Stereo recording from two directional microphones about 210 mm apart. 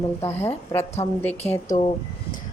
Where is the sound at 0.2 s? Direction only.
10° left (ahead or behind).